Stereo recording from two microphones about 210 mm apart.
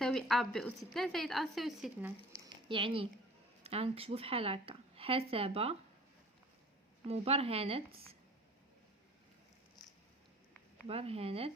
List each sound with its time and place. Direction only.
0.0 s a woman's voice: centre (ahead or behind)
2.6 s speech: 25° right (ahead or behind)
7.1 s speech: 30° right (ahead or behind)
10.8 s speech: 30° right (ahead or behind)